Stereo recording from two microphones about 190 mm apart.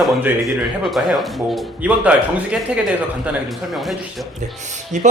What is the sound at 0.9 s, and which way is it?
Speech, centre (ahead or behind).